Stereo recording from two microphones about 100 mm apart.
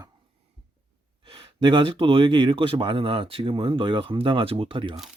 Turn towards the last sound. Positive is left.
turn(degrees=-60)  # may be behind; listen again after turning